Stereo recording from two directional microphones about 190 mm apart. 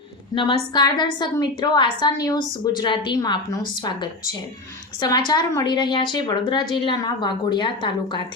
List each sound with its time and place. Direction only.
0.7 s a woman's voice: 20° left (ahead or behind)